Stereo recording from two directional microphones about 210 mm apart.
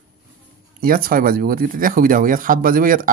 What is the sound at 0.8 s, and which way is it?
Speech, 45° right (ahead or behind).